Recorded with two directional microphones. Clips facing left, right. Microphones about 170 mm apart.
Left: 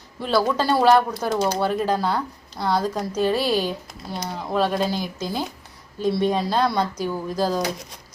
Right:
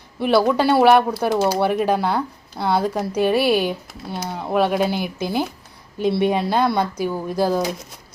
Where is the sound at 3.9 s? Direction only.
Centre (ahead or behind).